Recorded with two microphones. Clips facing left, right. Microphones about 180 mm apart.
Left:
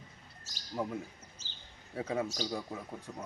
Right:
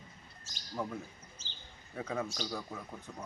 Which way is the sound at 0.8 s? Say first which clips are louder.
Left 2 dB; 20° left (ahead or behind).